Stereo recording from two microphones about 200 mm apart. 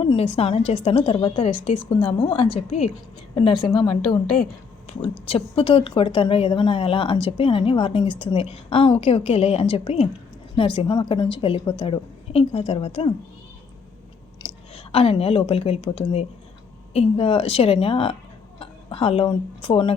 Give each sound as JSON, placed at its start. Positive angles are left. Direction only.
{"t": 0.0, "sound": "speech", "side_deg": 30}
{"t": 5.2, "sound": "speech", "side_deg": 30}
{"t": 14.4, "sound": "a sound", "side_deg": 20}
{"t": 14.9, "sound": "speech", "side_deg": 30}